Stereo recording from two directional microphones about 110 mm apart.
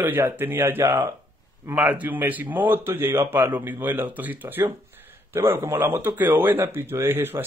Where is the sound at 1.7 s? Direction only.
15° right (ahead or behind).